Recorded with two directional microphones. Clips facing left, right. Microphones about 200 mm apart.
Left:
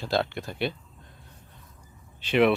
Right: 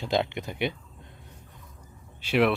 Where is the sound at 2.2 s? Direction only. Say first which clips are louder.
Left 2 dB; 5° right (ahead or behind).